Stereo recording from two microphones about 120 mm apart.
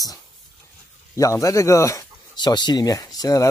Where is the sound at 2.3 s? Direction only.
40° left (ahead or behind).